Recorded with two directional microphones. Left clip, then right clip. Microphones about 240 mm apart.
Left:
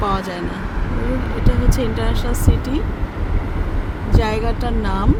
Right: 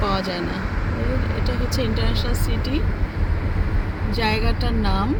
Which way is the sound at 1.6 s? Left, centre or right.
Centre.